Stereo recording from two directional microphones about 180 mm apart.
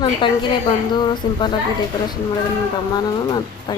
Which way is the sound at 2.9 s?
20° left (ahead or behind).